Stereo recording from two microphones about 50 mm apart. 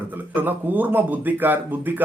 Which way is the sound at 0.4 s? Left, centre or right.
Right.